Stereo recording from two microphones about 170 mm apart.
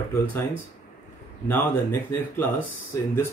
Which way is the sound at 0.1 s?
10° left (ahead or behind).